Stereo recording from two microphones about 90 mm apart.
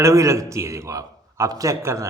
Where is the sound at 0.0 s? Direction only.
35° right (ahead or behind).